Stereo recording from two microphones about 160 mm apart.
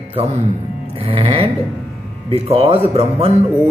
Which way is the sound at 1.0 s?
35° right (ahead or behind).